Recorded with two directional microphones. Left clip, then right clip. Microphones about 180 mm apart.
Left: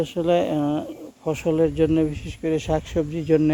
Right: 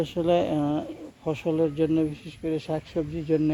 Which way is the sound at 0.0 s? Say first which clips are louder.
Left 3 dB; 5° left (ahead or behind).